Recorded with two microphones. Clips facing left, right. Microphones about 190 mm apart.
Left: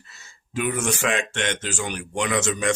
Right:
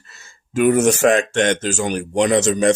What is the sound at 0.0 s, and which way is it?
Speech, 50° right (ahead or behind).